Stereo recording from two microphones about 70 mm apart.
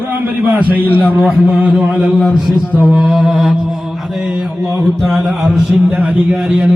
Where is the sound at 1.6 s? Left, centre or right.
Right.